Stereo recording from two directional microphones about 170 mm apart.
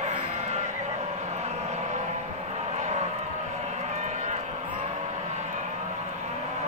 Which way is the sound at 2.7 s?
45° right (ahead or behind).